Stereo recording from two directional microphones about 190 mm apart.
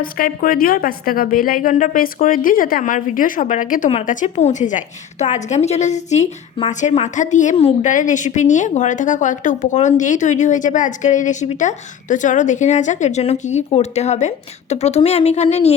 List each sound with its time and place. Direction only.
0.0 s a woman's voice: 50° left (ahead or behind)